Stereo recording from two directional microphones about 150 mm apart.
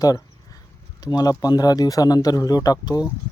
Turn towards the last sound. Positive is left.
turn(degrees=25)  # may be behind; listen again after turning